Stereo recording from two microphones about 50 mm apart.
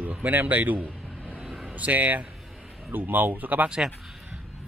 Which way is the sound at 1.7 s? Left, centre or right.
Right.